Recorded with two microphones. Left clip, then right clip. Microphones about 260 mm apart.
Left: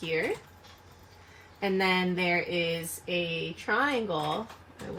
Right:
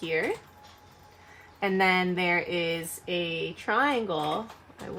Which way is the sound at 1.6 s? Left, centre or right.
Centre.